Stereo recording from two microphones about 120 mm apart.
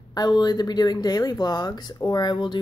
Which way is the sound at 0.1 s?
35° left (ahead or behind).